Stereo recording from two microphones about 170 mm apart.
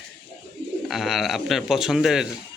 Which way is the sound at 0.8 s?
Centre (ahead or behind).